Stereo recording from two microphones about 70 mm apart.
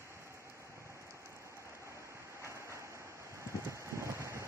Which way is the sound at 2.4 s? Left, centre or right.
Right.